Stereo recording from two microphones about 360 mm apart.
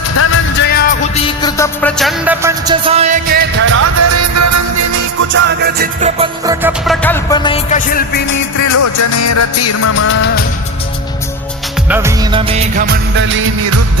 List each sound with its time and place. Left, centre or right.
0.2 s music: left
1.4 s music: centre; by 5.0 s right
5.3 s music: right; by 8.4 s left
8.6 s music: left
11.9 s music of bollywood: centre; by 13.8 s right